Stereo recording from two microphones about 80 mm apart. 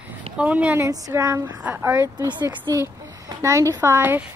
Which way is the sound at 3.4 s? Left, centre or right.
Right.